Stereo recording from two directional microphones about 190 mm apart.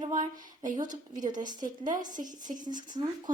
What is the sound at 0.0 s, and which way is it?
Speech, 40° right (ahead or behind).